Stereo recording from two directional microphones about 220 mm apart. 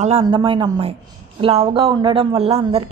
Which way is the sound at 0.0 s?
25° right (ahead or behind).